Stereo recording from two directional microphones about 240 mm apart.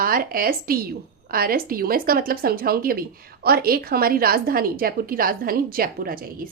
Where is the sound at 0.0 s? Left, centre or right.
Right.